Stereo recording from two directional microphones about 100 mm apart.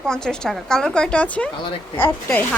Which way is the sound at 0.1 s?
5° left (ahead or behind).